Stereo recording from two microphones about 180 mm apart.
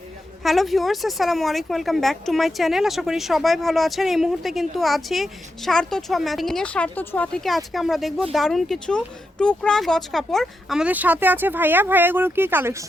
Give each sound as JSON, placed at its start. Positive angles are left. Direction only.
{"t": 0.4, "sound": "speech", "side_deg": 0}